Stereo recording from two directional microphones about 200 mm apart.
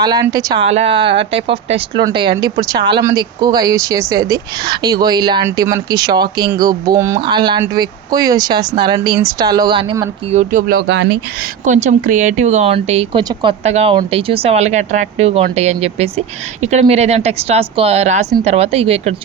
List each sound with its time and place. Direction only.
0.0 s speech: 20° right (ahead or behind)
0.6 s speech: 30° right (ahead or behind)
10.3 s speech: 40° right (ahead or behind); by 11.0 s 55° right (ahead or behind)
11.6 s speech: 40° right (ahead or behind)